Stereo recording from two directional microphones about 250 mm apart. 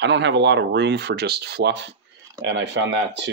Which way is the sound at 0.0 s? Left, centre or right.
Right.